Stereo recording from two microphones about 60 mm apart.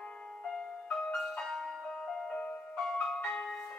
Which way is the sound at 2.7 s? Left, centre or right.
Centre.